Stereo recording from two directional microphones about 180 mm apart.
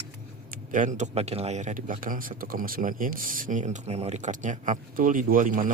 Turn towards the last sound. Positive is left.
turn(degrees=-50)  # may be behind; listen again after turning